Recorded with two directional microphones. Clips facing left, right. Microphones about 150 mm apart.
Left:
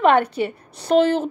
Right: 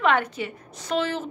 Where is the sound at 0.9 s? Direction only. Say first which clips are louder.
Left 10 dB; 45° left (ahead or behind).